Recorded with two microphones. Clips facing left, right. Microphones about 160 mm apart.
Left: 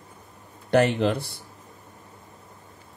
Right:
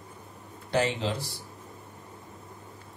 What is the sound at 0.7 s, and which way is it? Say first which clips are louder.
Speech: left 7 dB; 60° left (ahead or behind).